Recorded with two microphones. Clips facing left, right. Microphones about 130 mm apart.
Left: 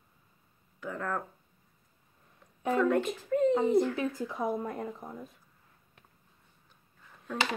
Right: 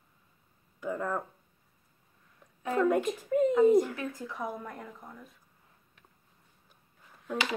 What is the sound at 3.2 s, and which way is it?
Speech, 15° right (ahead or behind).